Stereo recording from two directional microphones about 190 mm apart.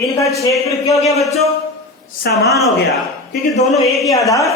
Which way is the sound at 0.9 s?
15° left (ahead or behind).